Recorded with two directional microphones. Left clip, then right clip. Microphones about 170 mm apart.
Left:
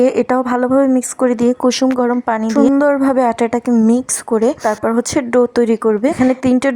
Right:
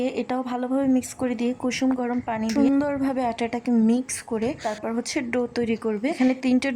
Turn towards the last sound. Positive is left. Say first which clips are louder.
# left 9 dB
turn(degrees=30)  # may be behind; listen again after turning